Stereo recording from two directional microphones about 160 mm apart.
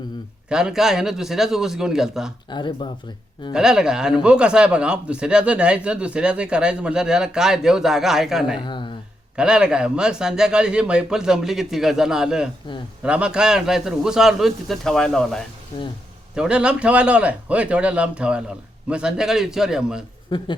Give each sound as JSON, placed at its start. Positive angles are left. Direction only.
{"t": 0.4, "sound": "speech", "side_deg": -5}
{"t": 2.5, "sound": "speech", "side_deg": 30}
{"t": 3.5, "sound": "speech", "side_deg": -5}
{"t": 8.6, "sound": "speech", "side_deg": 30}
{"t": 9.3, "sound": "a man's voice", "side_deg": -5}
{"t": 20.3, "sound": "speech", "side_deg": 30}